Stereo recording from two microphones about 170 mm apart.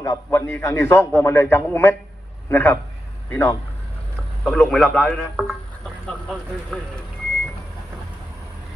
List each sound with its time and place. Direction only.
0.0 s a man's voice: 20° left (ahead or behind)
4.5 s a man's voice: 5° left (ahead or behind)
6.7 s a man's voice: 5° left (ahead or behind)